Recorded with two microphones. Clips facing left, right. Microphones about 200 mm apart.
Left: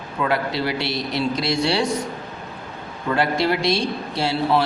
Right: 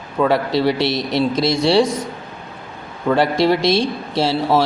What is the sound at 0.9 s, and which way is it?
Speech, 90° right.